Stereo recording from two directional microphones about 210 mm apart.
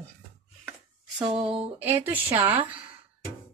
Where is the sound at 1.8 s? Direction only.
10° right (ahead or behind).